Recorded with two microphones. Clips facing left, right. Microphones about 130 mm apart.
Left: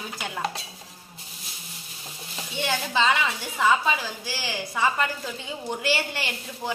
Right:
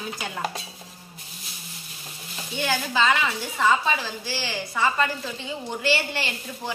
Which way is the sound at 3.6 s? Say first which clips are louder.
Even; 10° left (ahead or behind).